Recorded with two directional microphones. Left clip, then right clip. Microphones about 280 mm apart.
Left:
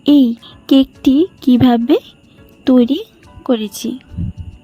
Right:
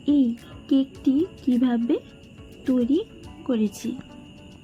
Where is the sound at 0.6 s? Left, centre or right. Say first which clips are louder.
Left 11 dB; left.